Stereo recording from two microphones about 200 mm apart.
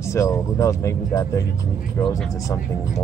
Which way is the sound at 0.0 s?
15° left (ahead or behind).